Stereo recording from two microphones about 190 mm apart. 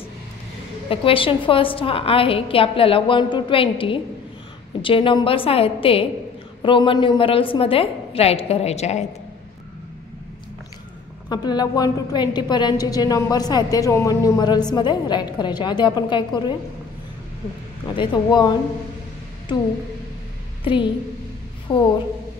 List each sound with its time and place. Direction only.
0.8 s a woman's voice: 30° left (ahead or behind)
11.2 s a woman's voice: 20° left (ahead or behind)
17.9 s a woman's voice: 25° left (ahead or behind)
20.6 s a woman's voice: 25° left (ahead or behind)